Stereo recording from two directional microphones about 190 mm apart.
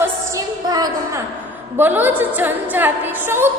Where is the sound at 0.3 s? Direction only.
20° right (ahead or behind).